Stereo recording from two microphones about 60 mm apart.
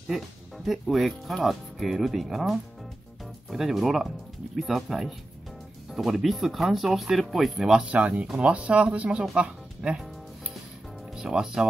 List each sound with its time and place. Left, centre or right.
0.7 s speech: centre
7.9 s speech: right
11.1 s speech: centre